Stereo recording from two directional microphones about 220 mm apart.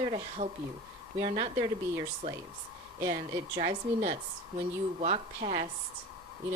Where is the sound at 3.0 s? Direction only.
30° right (ahead or behind).